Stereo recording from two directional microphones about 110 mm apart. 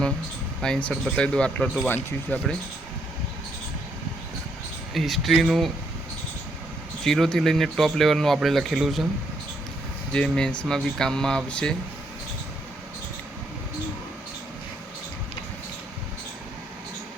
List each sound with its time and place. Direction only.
0.6 s speech: 10° left (ahead or behind)
4.9 s speech: centre (ahead or behind)
7.0 s speech: 5° left (ahead or behind)
10.1 s speech: 10° left (ahead or behind)